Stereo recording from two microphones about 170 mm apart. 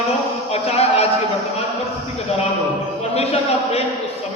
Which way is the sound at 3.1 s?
35° left (ahead or behind).